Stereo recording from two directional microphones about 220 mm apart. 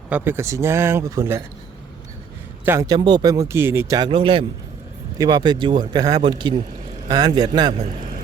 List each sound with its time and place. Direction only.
0.1 s speech: 10° right (ahead or behind)
2.6 s speech: 15° right (ahead or behind)